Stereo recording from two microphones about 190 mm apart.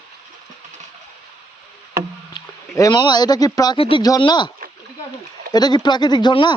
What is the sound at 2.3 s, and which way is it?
A man's voice, 20° left (ahead or behind).